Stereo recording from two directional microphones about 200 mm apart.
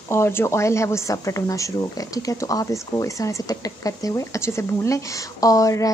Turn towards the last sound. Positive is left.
turn(degrees=15)  # may be behind; listen again after turning